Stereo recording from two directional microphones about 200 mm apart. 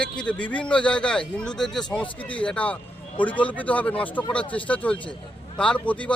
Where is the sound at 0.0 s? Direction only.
5° left (ahead or behind).